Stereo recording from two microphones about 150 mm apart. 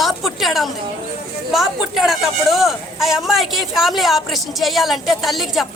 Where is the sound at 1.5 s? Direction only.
Centre (ahead or behind).